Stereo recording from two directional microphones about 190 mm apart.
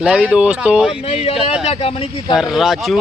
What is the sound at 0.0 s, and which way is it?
Speech, 5° right (ahead or behind).